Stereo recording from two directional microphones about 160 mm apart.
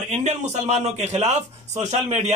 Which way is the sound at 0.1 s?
50° right (ahead or behind).